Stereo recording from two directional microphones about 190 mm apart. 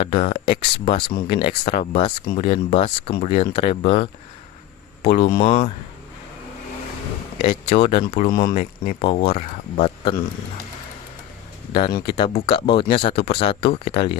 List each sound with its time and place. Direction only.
0.0 s speech: 30° left (ahead or behind)
5.1 s speech: 25° left (ahead or behind)
7.4 s speech: 30° left (ahead or behind)
8.5 s speech: 40° left (ahead or behind)
9.0 s speech: 30° left (ahead or behind)
11.7 s speech: 25° left (ahead or behind)